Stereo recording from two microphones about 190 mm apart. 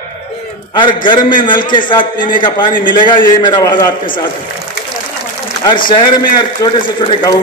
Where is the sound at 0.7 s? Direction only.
25° left (ahead or behind).